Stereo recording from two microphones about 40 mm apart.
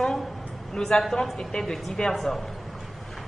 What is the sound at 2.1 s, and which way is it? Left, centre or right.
Speech, centre.